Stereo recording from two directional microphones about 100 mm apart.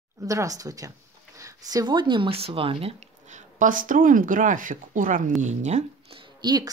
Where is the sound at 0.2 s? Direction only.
35° right (ahead or behind); by 3.0 s 70° right (ahead or behind).